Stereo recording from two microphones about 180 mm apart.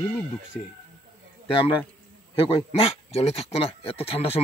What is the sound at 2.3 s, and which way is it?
Speech, 30° left (ahead or behind).